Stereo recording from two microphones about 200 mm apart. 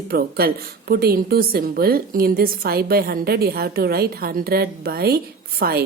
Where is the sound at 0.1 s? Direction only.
50° right (ahead or behind).